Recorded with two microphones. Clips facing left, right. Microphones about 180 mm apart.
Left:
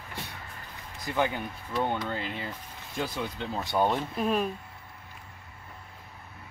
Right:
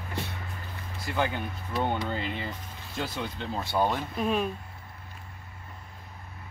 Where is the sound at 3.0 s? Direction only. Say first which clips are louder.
Left 1 dB; 15° left (ahead or behind).